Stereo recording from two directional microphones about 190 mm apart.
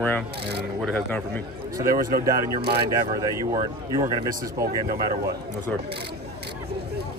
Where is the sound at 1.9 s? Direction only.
50° right (ahead or behind).